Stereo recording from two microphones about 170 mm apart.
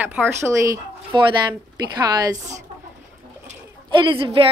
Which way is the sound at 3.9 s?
30° right (ahead or behind).